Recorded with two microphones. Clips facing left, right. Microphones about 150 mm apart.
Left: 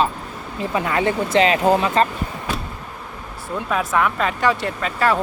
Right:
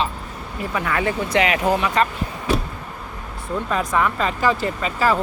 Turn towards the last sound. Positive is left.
turn(degrees=0)  # may be behind; listen again after turning